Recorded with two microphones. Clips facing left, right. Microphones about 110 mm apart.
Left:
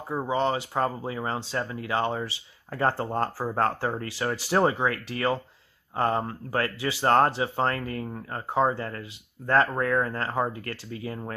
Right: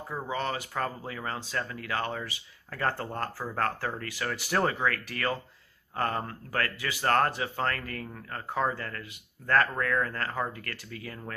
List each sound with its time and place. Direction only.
0.1 s speech: 25° left (ahead or behind)